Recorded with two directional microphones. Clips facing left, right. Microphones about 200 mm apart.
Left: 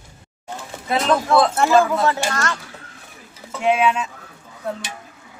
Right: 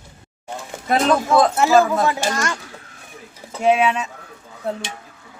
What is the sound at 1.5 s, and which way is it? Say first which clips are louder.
Speech: right 1 dB; 5° right (ahead or behind).